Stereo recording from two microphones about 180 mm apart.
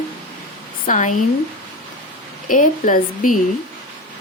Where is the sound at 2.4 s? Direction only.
45° left (ahead or behind).